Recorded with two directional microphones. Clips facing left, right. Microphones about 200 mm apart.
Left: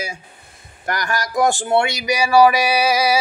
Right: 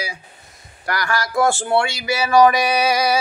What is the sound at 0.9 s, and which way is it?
Speech, 20° left (ahead or behind).